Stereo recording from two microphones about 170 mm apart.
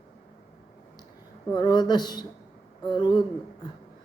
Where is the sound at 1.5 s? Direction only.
25° left (ahead or behind).